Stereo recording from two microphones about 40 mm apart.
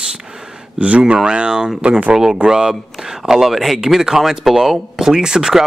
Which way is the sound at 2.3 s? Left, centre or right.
Centre.